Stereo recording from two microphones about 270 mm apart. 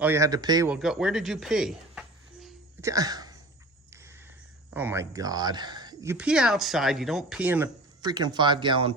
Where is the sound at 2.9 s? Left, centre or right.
Centre.